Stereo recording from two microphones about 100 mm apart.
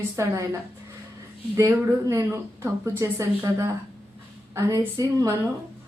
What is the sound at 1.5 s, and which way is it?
Speech, 30° right (ahead or behind).